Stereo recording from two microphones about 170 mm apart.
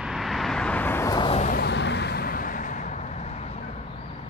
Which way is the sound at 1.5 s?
85° left.